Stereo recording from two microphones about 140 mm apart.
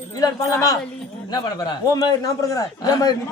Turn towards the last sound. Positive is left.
turn(degrees=25)  # may be behind; listen again after turning